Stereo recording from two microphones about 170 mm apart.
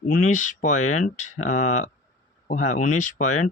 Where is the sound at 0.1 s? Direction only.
50° left (ahead or behind).